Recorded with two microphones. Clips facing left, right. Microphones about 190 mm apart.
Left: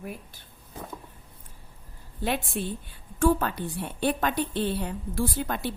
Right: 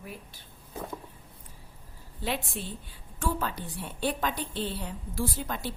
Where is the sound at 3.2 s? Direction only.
55° left (ahead or behind).